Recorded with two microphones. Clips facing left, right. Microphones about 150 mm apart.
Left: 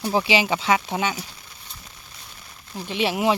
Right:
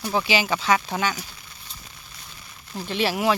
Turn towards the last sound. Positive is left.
turn(degrees=20)  # may be behind; listen again after turning